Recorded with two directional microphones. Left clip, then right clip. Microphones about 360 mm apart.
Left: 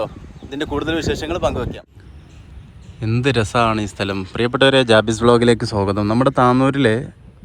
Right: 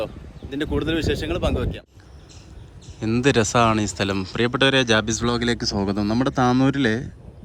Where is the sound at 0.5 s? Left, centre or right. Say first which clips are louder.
Left 3 dB; centre.